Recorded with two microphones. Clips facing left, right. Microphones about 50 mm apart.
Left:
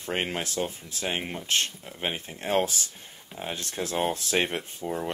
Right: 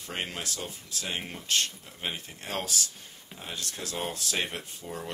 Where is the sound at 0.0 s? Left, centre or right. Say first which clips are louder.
Left 6 dB; left.